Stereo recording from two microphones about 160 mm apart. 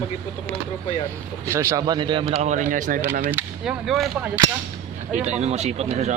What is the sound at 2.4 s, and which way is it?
Speech, 50° right (ahead or behind).